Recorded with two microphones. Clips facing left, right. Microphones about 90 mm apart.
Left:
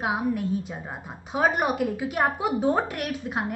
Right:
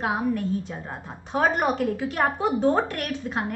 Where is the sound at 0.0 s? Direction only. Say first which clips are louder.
Right 1 dB; 10° left (ahead or behind).